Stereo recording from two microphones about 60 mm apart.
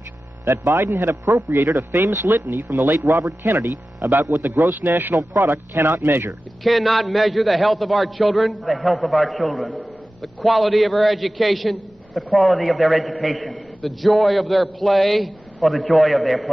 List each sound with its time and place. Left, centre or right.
0.5 s a man's voice: right
2.3 s speech: right
6.6 s a man's voice: centre